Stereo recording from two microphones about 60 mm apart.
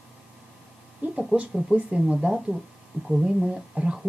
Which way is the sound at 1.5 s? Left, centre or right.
Centre.